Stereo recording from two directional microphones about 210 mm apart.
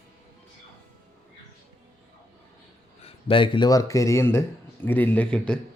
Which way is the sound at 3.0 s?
25° left (ahead or behind).